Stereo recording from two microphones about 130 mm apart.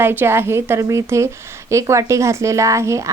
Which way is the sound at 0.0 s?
15° right (ahead or behind).